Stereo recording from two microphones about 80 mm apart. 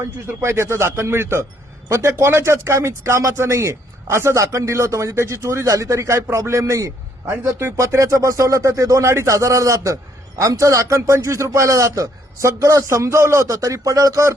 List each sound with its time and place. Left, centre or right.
0.0 s speech: right